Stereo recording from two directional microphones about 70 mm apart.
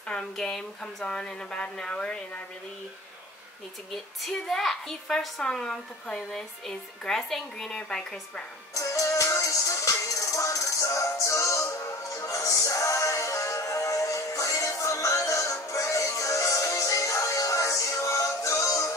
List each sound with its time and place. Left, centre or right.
0.1 s speech: centre
3.9 s a child's voice: centre
8.7 s music: left